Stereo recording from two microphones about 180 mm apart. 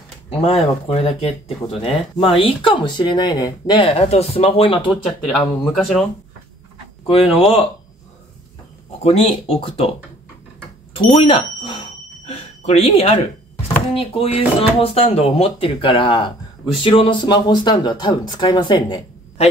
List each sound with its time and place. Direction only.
0.3 s speech: 35° left (ahead or behind)
5.0 s speech: centre (ahead or behind)
7.3 s speech: 30° left (ahead or behind)
9.0 s speech: 35° left (ahead or behind)
11.1 s speech: 30° left (ahead or behind)
12.3 s a sound: 35° left (ahead or behind)
13.9 s speech: 30° left (ahead or behind)